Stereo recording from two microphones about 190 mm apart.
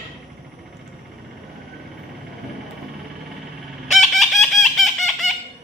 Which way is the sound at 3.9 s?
Centre (ahead or behind).